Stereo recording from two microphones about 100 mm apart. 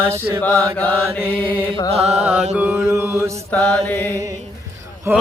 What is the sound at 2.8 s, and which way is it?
Mantra, 30° right (ahead or behind).